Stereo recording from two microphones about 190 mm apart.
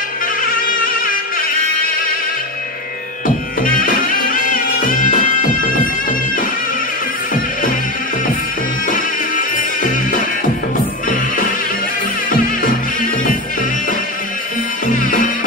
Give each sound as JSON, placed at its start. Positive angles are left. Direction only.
{"t": 3.6, "sound": "music", "side_deg": 45}
{"t": 8.8, "sound": "music", "side_deg": 45}
{"t": 14.9, "sound": "music", "side_deg": 45}